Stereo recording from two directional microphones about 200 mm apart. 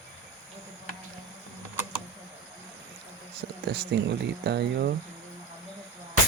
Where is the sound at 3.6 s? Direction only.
55° right (ahead or behind).